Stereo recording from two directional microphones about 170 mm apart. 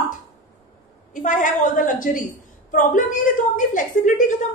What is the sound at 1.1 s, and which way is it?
A woman's voice, 50° left (ahead or behind).